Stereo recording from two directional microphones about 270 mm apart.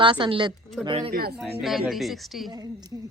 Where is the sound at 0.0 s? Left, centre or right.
Centre.